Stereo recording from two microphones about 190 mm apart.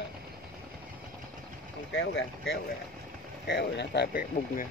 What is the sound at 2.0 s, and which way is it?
Speech, 65° left (ahead or behind).